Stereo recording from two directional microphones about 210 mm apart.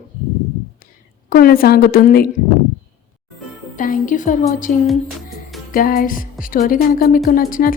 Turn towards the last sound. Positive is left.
turn(degrees=40)  # may be behind; listen again after turning